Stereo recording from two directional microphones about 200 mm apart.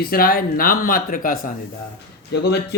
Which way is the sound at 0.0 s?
50° left (ahead or behind).